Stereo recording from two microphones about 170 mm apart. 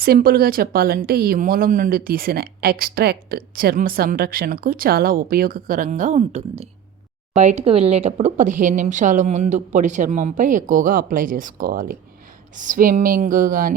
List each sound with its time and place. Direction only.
0.0 s speech: 60° right (ahead or behind)